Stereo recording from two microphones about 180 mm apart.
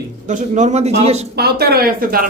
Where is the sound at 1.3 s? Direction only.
60° right (ahead or behind).